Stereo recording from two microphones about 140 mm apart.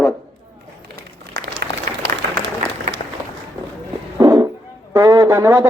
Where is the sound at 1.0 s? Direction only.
90° right.